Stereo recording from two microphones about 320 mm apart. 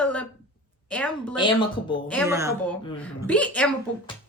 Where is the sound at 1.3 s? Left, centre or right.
Centre.